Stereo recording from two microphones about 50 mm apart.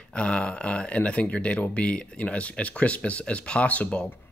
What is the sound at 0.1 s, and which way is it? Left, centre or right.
Speech, left.